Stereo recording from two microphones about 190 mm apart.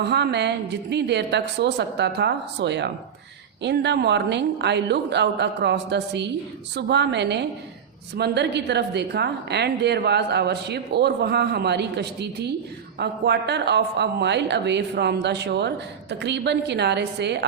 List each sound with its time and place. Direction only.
0.0 s a woman's voice: 60° right (ahead or behind)